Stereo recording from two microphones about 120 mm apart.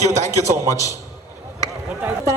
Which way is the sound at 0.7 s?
25° left (ahead or behind).